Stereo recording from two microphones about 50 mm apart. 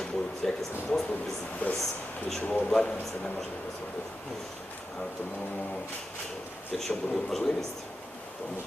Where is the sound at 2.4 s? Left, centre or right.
Left.